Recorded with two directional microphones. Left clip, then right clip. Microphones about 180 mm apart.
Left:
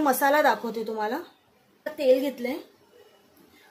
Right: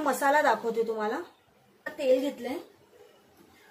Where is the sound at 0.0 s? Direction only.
40° left (ahead or behind).